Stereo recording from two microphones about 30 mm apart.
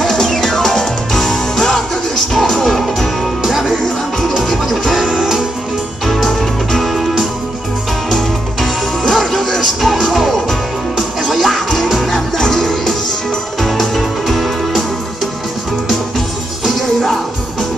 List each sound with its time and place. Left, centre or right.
0.0 s music: centre
5.0 s music: centre
6.2 s music: centre
6.9 s music: centre
8.1 s music: centre
12.4 s music: centre
13.6 s music: centre